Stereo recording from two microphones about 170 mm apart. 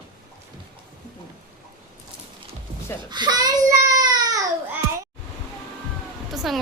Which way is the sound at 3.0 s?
25° right (ahead or behind).